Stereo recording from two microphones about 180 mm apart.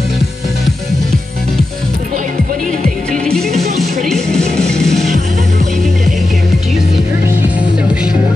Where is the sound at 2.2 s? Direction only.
45° right (ahead or behind).